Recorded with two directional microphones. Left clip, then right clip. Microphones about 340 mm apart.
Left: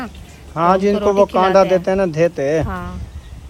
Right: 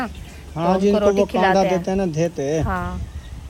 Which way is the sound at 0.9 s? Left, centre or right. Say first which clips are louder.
Left 3 dB; centre.